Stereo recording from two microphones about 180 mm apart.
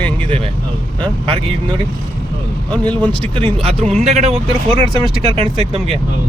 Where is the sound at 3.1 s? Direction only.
30° right (ahead or behind).